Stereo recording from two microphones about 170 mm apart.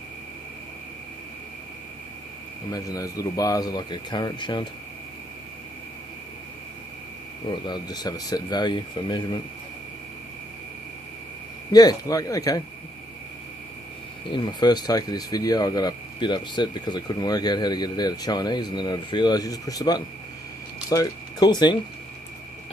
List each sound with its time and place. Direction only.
2.7 s speech: 20° left (ahead or behind)
7.4 s speech: 25° left (ahead or behind)
11.7 s speech: 25° left (ahead or behind)
14.3 s speech: 25° left (ahead or behind)